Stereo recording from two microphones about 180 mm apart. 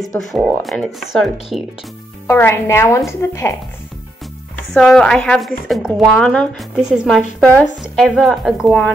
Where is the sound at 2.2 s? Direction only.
10° left (ahead or behind).